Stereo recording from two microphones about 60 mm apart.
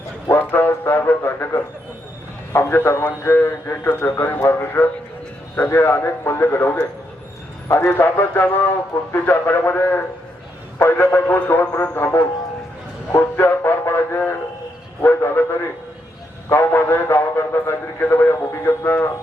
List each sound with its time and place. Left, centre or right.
0.3 s a sound: left
2.6 s a man's voice: left
3.8 s a man's voice: left
13.1 s music: left
15.0 s a man's voice: left